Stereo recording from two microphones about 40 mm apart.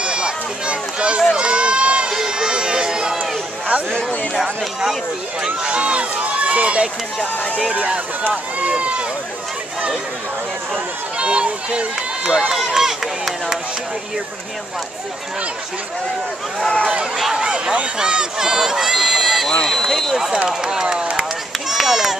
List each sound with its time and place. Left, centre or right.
0.0 s run: right
2.0 s run: centre
5.6 s speech: right
11.1 s speech: right
12.3 s speech: centre
17.2 s a sound: centre
17.9 s speech: centre
19.6 s speech: centre
20.4 s speech: centre
21.6 s a sound: centre